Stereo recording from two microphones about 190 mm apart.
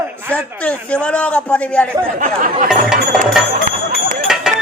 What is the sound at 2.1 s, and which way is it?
Speech, 45° right (ahead or behind).